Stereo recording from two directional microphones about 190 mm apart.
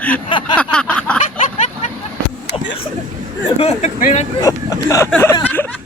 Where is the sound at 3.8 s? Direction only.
40° left (ahead or behind).